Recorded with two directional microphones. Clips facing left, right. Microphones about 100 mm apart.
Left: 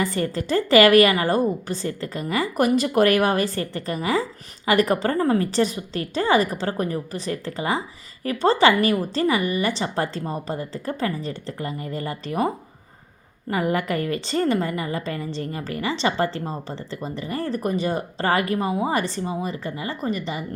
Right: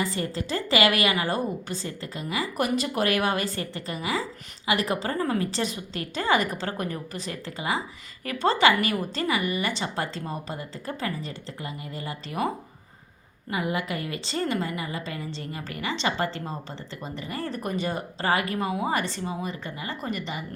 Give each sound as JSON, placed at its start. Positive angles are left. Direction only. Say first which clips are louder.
{"t": 0.0, "sound": "a woman's voice", "louder": "left 5 dB", "side_deg": 50}
{"t": 5.2, "sound": "a woman's voice", "louder": "left 5 dB", "side_deg": 35}
{"t": 5.5, "sound": "a woman's voice", "louder": "left 7 dB", "side_deg": 45}
{"t": 13.5, "sound": "a woman's voice", "louder": "left 5 dB", "side_deg": 45}
{"t": 18.9, "sound": "a woman's voice", "louder": "left 4 dB", "side_deg": 50}